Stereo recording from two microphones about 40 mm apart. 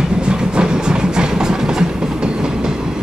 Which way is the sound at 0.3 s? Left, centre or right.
Right.